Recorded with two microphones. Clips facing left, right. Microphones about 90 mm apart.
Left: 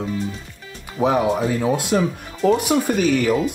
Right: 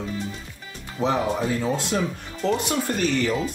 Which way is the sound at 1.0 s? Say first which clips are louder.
Left 5 dB; 10° left (ahead or behind).